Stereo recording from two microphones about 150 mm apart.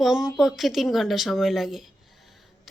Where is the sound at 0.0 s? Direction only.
Centre (ahead or behind).